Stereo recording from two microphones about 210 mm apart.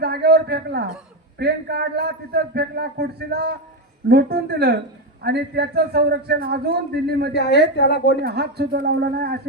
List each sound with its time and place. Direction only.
0.0 s a man's voice: 50° right (ahead or behind)
7.3 s a woman's voice: 50° left (ahead or behind)
8.2 s a man's voice: 50° right (ahead or behind)